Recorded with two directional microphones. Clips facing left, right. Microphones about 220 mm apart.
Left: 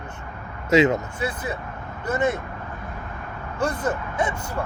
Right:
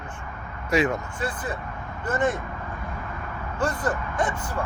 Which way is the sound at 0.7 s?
25° left (ahead or behind).